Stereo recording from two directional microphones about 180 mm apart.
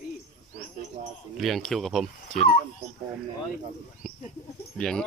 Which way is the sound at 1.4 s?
Centre (ahead or behind).